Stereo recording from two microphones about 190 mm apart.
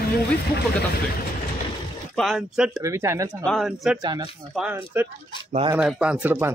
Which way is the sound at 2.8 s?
15° right (ahead or behind).